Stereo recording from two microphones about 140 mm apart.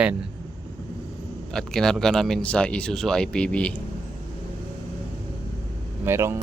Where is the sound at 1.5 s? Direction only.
5° left (ahead or behind).